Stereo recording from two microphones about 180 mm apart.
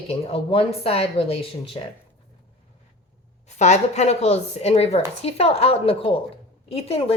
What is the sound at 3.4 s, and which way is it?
A woman's voice, 40° left (ahead or behind).